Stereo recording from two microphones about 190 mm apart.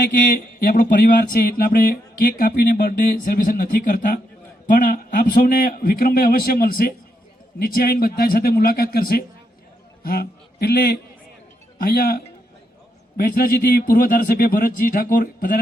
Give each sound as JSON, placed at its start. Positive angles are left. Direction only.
{"t": 0.6, "sound": "a man's voice", "side_deg": 50}